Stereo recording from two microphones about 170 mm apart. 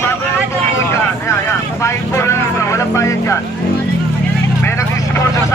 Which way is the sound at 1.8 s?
15° left (ahead or behind).